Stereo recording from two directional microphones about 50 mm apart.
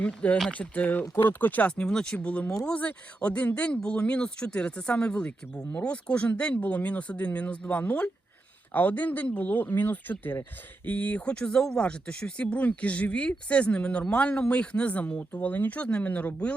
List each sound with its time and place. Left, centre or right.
0.0 s speech: left
2.1 s speech: left